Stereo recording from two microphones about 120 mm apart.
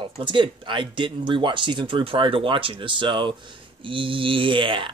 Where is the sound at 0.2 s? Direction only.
45° right (ahead or behind).